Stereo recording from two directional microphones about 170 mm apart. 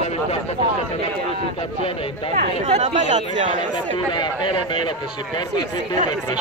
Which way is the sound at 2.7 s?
40° right (ahead or behind).